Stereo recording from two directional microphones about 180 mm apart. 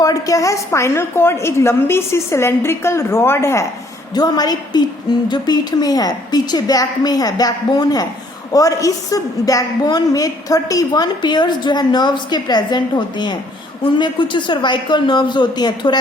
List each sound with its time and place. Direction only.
0.0 s a woman's voice: 20° left (ahead or behind)